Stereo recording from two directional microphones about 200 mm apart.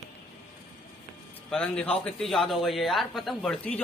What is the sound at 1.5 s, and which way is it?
A man's voice, 5° left (ahead or behind).